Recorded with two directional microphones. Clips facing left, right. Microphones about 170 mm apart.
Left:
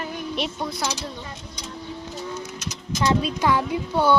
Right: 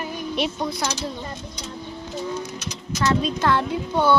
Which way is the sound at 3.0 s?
15° left (ahead or behind).